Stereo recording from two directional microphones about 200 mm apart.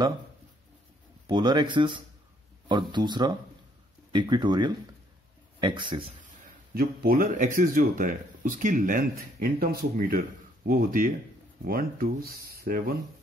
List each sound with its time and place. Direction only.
1.2 s speech: 20° right (ahead or behind)
6.4 s speech: 45° right (ahead or behind)